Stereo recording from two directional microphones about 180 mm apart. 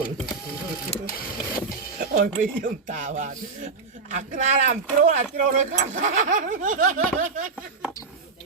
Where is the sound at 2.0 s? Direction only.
50° right (ahead or behind).